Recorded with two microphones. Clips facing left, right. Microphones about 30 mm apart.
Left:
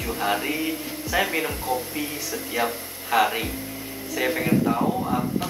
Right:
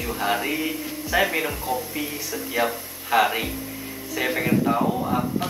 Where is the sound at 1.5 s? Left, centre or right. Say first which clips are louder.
Even; left.